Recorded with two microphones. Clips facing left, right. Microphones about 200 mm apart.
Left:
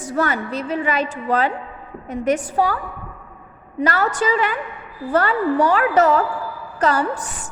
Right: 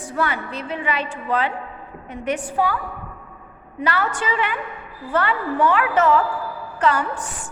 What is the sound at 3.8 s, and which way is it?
A woman's voice, 40° left (ahead or behind).